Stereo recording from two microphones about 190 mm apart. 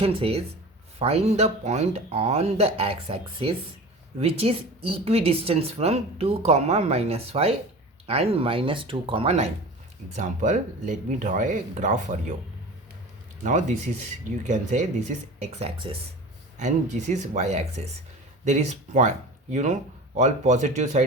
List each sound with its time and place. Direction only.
0.0 s a woman's voice: 30° right (ahead or behind)
13.4 s a woman's voice: 40° right (ahead or behind)